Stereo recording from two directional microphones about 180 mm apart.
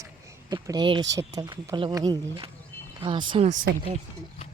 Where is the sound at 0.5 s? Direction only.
25° right (ahead or behind); by 3.7 s 40° right (ahead or behind).